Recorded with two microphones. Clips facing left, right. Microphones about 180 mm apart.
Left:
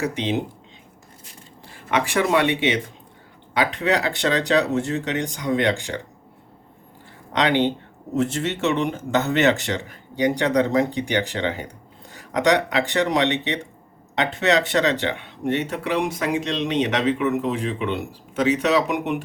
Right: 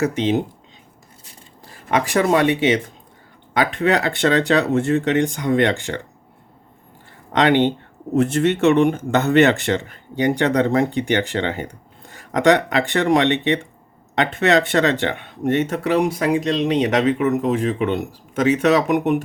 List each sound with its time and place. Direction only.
0.0 s speech: 45° right (ahead or behind)
1.6 s speech: 40° right (ahead or behind); by 6.0 s 55° right (ahead or behind)
7.3 s speech: 55° right (ahead or behind)